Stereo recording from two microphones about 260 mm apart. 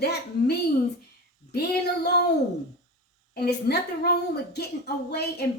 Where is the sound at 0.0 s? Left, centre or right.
Left.